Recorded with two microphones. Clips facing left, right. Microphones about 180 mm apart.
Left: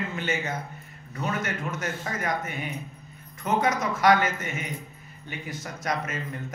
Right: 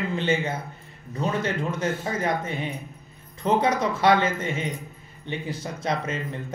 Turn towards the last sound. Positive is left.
turn(degrees=-30)  # may be behind; listen again after turning